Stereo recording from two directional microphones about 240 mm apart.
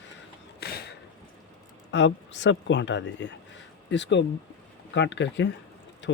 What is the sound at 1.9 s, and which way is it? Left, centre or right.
Speech, left.